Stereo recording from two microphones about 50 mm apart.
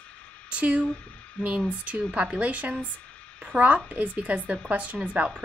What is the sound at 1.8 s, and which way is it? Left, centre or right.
A woman's voice, right.